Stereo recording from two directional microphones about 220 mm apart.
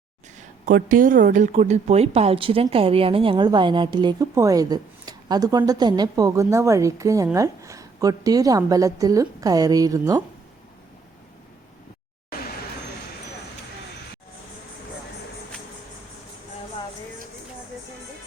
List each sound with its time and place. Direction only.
0.6 s a woman's voice: 40° right (ahead or behind); by 10.2 s 15° right (ahead or behind)